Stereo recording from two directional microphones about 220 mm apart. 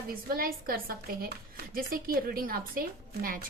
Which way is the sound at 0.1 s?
40° right (ahead or behind).